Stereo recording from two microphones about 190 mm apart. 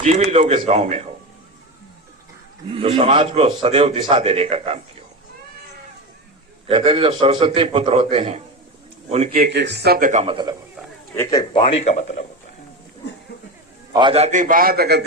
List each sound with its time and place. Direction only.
0.0 s speech: 35° right (ahead or behind)
2.6 s a man's voice: 30° right (ahead or behind)
6.7 s a man's voice: 30° right (ahead or behind)
9.3 s speech: 60° right (ahead or behind)
10.1 s speech: 35° right (ahead or behind)
11.2 s a man's voice: 20° left (ahead or behind)
11.6 s a man's voice: 35° left (ahead or behind)
13.9 s a man's voice: 25° right (ahead or behind); by 15.0 s 55° right (ahead or behind)